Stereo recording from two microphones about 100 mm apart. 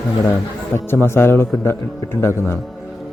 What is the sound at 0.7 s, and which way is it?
Speech, 25° left (ahead or behind).